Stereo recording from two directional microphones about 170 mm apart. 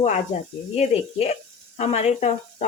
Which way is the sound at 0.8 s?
40° left (ahead or behind).